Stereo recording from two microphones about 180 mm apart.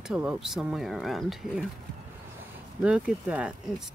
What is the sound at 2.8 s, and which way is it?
Speech, 5° right (ahead or behind).